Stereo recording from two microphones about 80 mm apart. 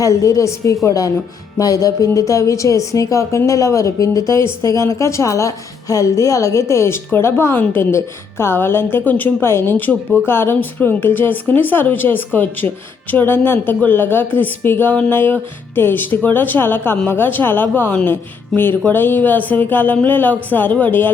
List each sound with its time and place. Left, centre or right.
0.0 s a woman's voice: left